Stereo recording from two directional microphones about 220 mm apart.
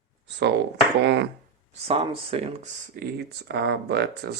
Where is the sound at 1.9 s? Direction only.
25° right (ahead or behind).